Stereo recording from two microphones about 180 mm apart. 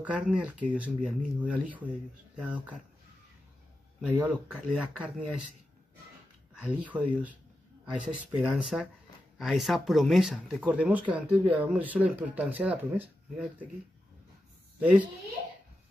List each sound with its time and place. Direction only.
0.0 s speech: 5° right (ahead or behind)
4.1 s speech: 10° right (ahead or behind)
6.6 s speech: 5° right (ahead or behind)
14.8 s a woman's voice: 5° right (ahead or behind)